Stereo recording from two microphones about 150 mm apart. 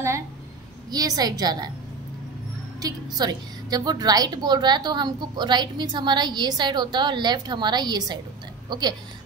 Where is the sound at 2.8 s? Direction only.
25° right (ahead or behind).